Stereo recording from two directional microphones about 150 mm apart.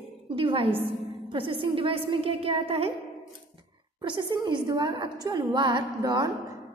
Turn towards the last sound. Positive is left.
turn(degrees=-30)  # may be behind; listen again after turning